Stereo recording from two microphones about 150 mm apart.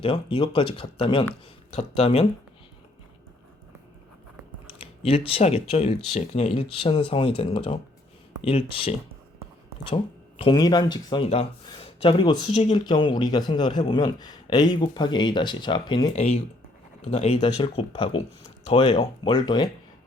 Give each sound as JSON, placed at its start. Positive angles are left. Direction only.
{"t": 0.0, "sound": "speech", "side_deg": 35}
{"t": 4.6, "sound": "speech", "side_deg": 40}
{"t": 12.5, "sound": "speech", "side_deg": 45}
{"t": 12.8, "sound": "a man's voice", "side_deg": 30}
{"t": 16.1, "sound": "speech", "side_deg": 50}